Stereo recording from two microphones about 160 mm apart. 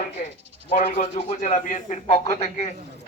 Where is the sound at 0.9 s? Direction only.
45° left (ahead or behind).